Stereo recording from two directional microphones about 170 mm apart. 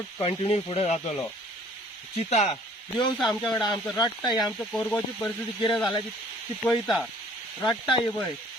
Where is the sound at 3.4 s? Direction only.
25° left (ahead or behind).